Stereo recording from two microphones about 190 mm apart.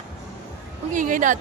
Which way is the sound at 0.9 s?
45° right (ahead or behind).